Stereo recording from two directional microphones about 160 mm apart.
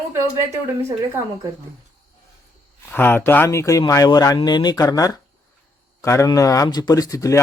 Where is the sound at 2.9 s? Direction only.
10° left (ahead or behind).